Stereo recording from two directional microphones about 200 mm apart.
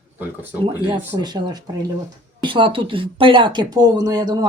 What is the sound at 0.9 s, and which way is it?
Speech, 20° right (ahead or behind).